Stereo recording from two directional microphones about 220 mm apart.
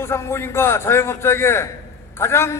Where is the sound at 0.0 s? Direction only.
10° left (ahead or behind).